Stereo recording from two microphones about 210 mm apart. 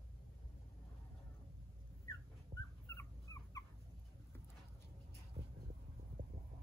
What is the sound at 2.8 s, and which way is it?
Dog, 15° left (ahead or behind).